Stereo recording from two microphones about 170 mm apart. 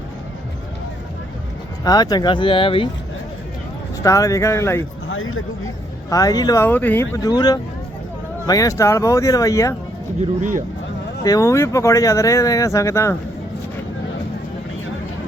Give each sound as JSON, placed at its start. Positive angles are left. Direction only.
{"t": 1.8, "sound": "speech", "side_deg": 20}
{"t": 4.0, "sound": "speech", "side_deg": 20}
{"t": 6.1, "sound": "speech", "side_deg": 20}
{"t": 11.2, "sound": "speech", "side_deg": 20}